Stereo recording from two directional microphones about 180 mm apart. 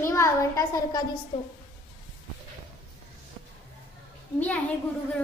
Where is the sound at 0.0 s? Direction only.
15° left (ahead or behind).